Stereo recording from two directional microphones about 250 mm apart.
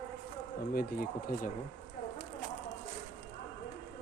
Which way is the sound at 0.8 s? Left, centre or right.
Left.